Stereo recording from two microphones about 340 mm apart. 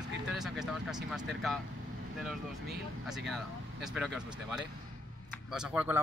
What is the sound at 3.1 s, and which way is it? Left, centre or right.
Speech, centre.